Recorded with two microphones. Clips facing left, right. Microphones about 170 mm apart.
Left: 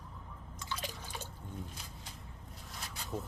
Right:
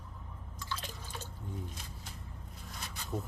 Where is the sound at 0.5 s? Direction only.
15° left (ahead or behind).